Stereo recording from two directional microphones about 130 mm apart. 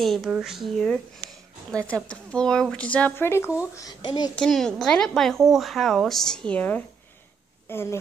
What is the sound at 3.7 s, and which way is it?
Speech, 30° left (ahead or behind).